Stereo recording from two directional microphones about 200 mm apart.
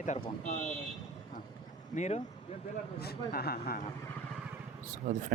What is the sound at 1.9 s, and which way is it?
Speech, 35° left (ahead or behind).